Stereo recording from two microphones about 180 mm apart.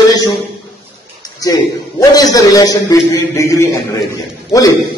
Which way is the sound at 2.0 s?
20° left (ahead or behind).